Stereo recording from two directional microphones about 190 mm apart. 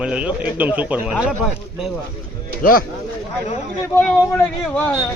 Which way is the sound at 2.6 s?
50° left (ahead or behind).